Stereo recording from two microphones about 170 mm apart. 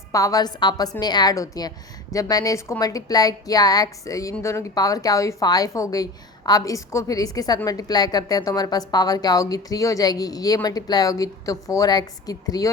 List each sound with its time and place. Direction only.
0.1 s a woman's voice: 20° left (ahead or behind)